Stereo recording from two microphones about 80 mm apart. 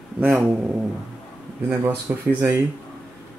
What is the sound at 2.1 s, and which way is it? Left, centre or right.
Speech, right.